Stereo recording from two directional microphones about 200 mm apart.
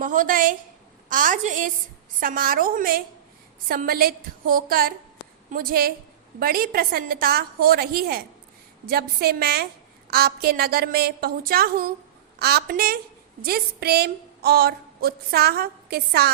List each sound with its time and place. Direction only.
0.0 s a woman's voice: 40° right (ahead or behind)